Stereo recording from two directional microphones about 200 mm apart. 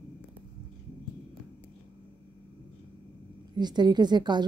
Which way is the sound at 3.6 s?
20° right (ahead or behind).